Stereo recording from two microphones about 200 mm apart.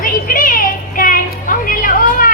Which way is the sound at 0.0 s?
45° left (ahead or behind).